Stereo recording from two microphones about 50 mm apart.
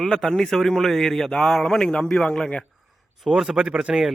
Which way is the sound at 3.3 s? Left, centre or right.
Centre.